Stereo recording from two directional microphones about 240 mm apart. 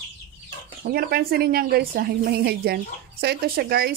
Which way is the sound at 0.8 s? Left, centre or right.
Right.